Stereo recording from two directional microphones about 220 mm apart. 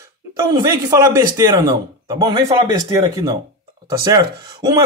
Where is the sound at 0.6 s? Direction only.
15° right (ahead or behind).